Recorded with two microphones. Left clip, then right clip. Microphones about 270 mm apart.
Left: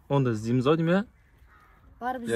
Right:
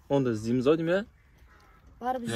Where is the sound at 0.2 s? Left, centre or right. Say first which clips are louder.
Even; left.